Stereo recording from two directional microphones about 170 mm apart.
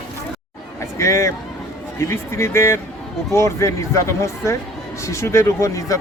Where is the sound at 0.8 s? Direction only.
15° left (ahead or behind).